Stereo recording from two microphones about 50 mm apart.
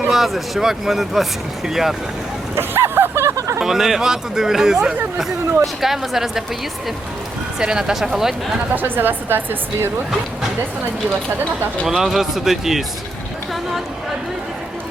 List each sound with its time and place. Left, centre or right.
0.1 s speech: centre
2.6 s a sound: right
3.6 s speech: centre
7.6 s speech: centre
8.7 s speech: right
11.9 s speech: centre